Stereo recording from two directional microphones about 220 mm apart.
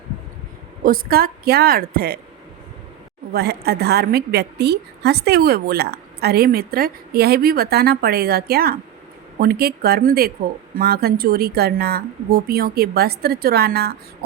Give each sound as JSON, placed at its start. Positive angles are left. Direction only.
{"t": 0.9, "sound": "a woman's voice", "side_deg": -40}
{"t": 3.3, "sound": "a woman's voice", "side_deg": -45}